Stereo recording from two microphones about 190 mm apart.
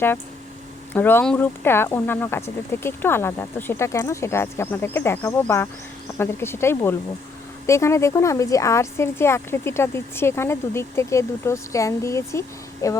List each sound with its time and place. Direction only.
0.9 s speech: 10° left (ahead or behind)